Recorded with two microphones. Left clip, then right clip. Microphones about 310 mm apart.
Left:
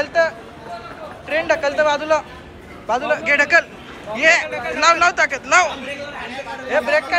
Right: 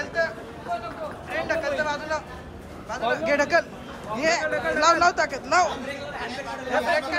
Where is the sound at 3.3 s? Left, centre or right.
Centre.